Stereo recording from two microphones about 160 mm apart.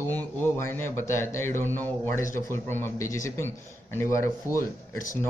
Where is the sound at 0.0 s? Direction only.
15° left (ahead or behind).